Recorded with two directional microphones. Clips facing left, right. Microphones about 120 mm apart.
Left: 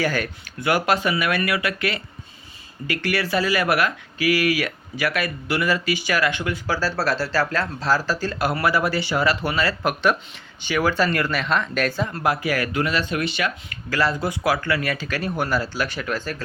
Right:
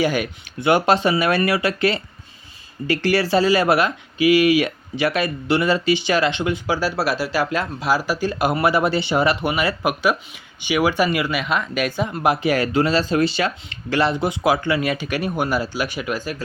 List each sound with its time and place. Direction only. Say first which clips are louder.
0.0 s speech: right 3 dB; 20° right (ahead or behind)